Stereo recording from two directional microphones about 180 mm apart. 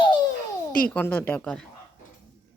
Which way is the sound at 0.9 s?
10° left (ahead or behind).